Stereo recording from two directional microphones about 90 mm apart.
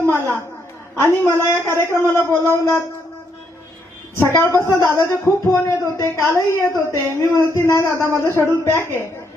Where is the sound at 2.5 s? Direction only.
25° left (ahead or behind).